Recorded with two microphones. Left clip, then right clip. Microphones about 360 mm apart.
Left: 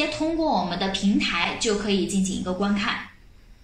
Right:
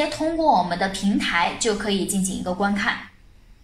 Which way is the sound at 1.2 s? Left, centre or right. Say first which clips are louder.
Right 6 dB; right.